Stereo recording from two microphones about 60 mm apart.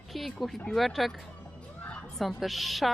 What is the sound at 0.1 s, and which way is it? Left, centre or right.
A woman's voice, centre.